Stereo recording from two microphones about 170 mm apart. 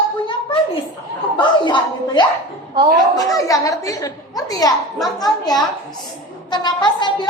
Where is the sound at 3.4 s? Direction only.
20° left (ahead or behind).